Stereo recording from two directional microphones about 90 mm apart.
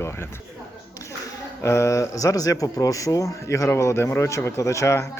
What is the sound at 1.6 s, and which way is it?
Speech, 30° left (ahead or behind).